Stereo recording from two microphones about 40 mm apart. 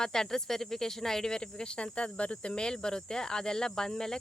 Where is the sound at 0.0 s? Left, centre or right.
Centre.